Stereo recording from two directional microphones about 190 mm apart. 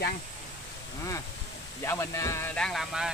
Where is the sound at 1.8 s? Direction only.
15° left (ahead or behind).